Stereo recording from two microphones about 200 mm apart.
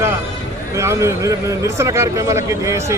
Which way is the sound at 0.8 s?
15° right (ahead or behind).